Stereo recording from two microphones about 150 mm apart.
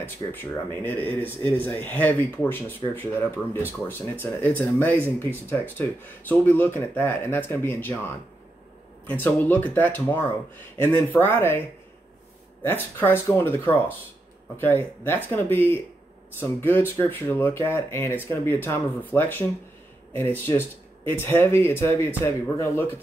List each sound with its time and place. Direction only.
0.0 s speech: 15° left (ahead or behind)
9.2 s speech: 10° left (ahead or behind)
12.6 s speech: 15° left (ahead or behind)